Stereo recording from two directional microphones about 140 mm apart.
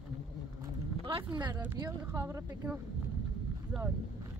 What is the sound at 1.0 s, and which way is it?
Speech, 35° right (ahead or behind).